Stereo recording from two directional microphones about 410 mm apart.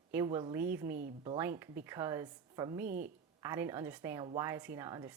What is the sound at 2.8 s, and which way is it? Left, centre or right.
Speech, right.